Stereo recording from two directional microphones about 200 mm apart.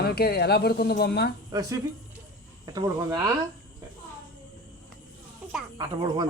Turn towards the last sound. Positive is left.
turn(degrees=-20)  # may be behind; listen again after turning